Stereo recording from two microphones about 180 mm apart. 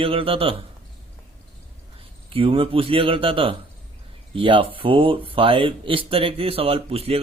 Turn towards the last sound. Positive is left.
turn(degrees=-35)  # may be behind; listen again after turning